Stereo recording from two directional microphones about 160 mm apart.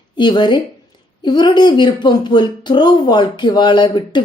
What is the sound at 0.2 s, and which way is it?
Speech, 30° left (ahead or behind).